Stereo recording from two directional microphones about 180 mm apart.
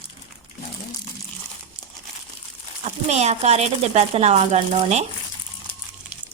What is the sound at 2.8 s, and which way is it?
Speech, 40° right (ahead or behind).